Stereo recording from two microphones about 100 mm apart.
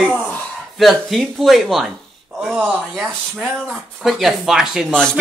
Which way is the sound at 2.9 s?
5° left (ahead or behind).